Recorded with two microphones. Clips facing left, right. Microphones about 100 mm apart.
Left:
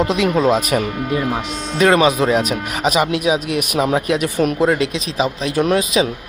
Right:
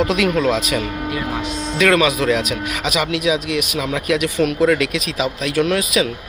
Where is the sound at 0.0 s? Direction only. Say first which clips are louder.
Left 1 dB; 30° left (ahead or behind).